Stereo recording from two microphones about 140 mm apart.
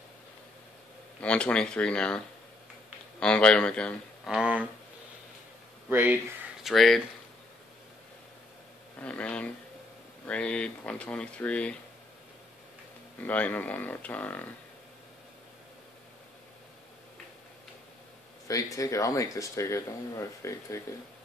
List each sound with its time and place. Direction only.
1.2 s speech: 10° left (ahead or behind)
4.3 s speech: 5° right (ahead or behind)
5.9 s speech: 15° right (ahead or behind)
6.6 s speech: centre (ahead or behind)
9.0 s speech: 10° left (ahead or behind)
13.2 s speech: 10° left (ahead or behind)
18.5 s speech: 25° left (ahead or behind)